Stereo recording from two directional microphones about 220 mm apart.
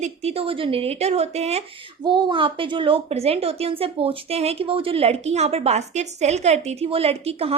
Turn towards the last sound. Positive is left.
turn(degrees=-25)  # may be behind; listen again after turning